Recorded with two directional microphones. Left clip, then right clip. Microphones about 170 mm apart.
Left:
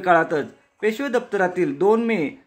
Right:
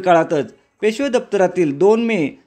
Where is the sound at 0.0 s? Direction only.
35° right (ahead or behind).